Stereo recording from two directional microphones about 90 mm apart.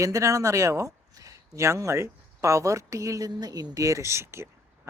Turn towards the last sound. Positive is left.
turn(degrees=-30)  # may be behind; listen again after turning